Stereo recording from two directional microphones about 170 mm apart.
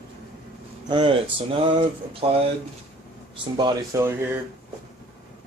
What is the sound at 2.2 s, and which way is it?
Speech, 35° right (ahead or behind).